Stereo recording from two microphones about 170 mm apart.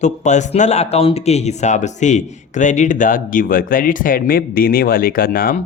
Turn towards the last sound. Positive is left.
turn(degrees=60)  # may be behind; listen again after turning